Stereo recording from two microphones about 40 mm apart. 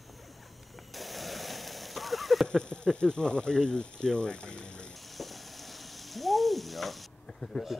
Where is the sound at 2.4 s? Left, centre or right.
Left.